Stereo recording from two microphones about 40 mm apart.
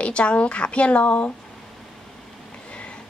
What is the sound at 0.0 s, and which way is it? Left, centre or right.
A woman's voice, left.